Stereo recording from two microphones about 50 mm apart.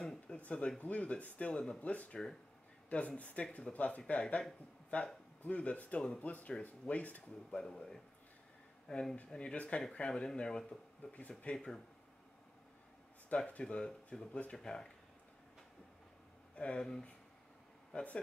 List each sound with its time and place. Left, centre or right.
0.0 s a sound: centre
0.4 s speech: left
1.5 s speech: centre
1.8 s speech: left
5.4 s speech: left
7.5 s speech: centre
8.9 s speech: centre
11.5 s speech: centre
13.3 s speech: left
16.5 s speech: centre